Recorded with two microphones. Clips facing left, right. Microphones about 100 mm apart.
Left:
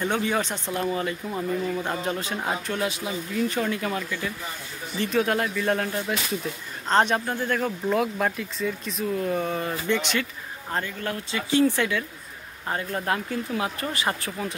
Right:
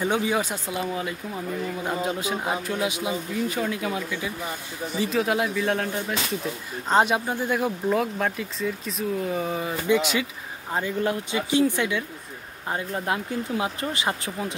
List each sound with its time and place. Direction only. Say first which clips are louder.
0.0 s speech: right 1 dB; 10° right (ahead or behind)
7.9 s speech: left 3 dB; centre (ahead or behind); by 14.5 s 20° right (ahead or behind)